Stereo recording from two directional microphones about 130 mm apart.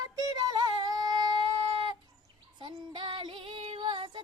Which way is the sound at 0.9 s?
30° right (ahead or behind).